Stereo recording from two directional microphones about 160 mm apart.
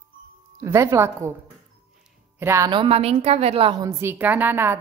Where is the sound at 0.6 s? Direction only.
20° right (ahead or behind).